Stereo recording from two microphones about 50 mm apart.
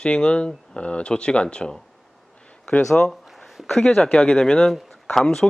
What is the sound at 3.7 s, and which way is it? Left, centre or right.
Speech, centre.